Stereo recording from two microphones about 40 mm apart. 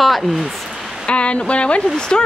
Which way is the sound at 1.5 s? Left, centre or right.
Left.